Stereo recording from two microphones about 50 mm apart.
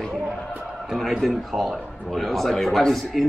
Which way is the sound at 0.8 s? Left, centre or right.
Centre.